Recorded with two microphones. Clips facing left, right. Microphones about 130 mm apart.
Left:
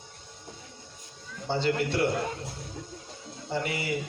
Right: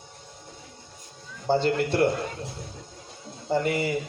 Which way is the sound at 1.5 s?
45° right (ahead or behind).